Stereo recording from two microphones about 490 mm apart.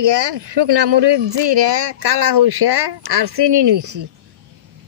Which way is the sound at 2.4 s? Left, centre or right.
Right.